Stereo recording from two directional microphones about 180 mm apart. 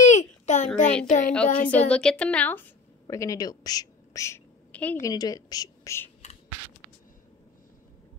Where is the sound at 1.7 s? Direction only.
5° left (ahead or behind).